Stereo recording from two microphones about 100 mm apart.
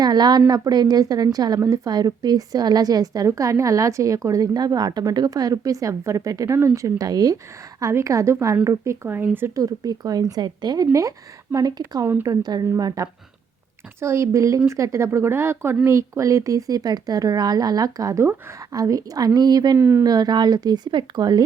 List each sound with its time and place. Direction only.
0.0 s a woman's voice: 45° right (ahead or behind); by 9.5 s 20° right (ahead or behind)
9.6 s a woman's voice: 35° right (ahead or behind)
19.7 s speech: 25° right (ahead or behind)
20.1 s speech: 45° right (ahead or behind)